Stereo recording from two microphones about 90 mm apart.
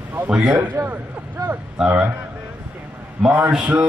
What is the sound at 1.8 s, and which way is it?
Speech, 15° right (ahead or behind).